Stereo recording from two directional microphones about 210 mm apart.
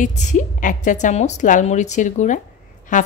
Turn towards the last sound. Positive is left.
turn(degrees=40)  # may be behind; listen again after turning